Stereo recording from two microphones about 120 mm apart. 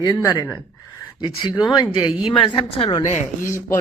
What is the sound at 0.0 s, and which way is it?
Speech, 35° left (ahead or behind).